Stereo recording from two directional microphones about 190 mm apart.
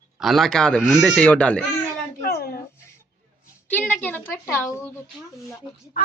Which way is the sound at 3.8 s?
10° left (ahead or behind).